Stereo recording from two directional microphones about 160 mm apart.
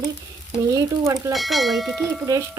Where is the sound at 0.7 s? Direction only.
20° right (ahead or behind).